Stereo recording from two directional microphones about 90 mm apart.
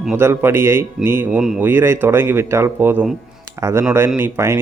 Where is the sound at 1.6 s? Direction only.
25° right (ahead or behind).